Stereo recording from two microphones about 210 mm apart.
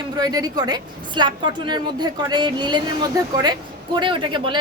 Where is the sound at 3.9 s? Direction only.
25° right (ahead or behind).